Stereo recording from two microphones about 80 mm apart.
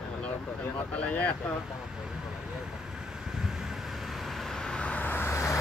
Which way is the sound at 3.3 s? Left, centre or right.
Centre.